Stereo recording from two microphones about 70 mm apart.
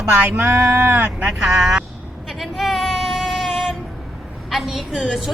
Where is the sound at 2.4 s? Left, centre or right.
Centre.